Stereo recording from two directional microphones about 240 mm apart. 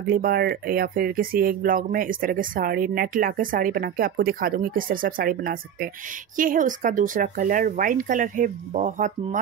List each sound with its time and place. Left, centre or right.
0.1 s speech: right